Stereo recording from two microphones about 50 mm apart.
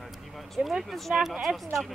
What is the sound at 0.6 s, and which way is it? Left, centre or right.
Speech, centre.